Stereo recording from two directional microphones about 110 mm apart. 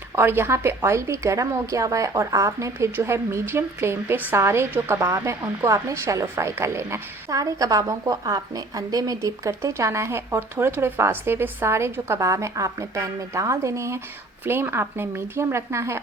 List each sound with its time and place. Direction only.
0.2 s speech: 20° right (ahead or behind)